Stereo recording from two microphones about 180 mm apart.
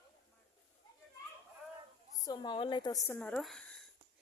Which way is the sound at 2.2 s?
25° left (ahead or behind).